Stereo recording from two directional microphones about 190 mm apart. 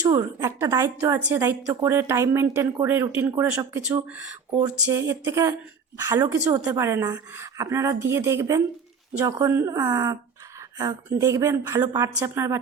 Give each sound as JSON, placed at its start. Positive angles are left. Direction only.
{"t": 0.1, "sound": "a woman's voice", "side_deg": -20}
{"t": 11.2, "sound": "a woman's voice", "side_deg": -15}